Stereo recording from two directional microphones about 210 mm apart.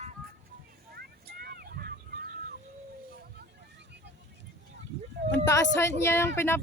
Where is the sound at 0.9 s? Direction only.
45° right (ahead or behind).